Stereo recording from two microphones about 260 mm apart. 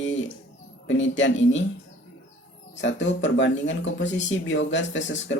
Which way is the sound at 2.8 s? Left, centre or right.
Left.